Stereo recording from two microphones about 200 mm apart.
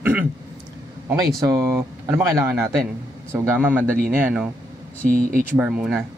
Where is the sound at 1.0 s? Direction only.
20° right (ahead or behind).